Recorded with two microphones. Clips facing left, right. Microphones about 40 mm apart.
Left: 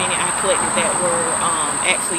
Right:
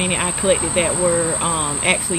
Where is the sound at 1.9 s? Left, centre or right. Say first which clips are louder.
Right 2 dB; centre.